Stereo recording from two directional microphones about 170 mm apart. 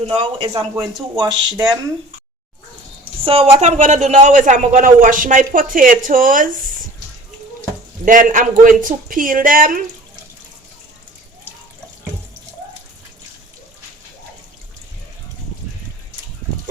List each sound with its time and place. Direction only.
0.1 s speech: 30° right (ahead or behind)
3.2 s a man's voice: 35° right (ahead or behind); by 6.5 s 55° right (ahead or behind)
8.0 s a man's voice: 50° right (ahead or behind)